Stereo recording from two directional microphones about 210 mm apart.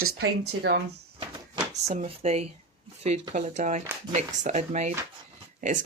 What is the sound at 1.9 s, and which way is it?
Speech, 30° right (ahead or behind).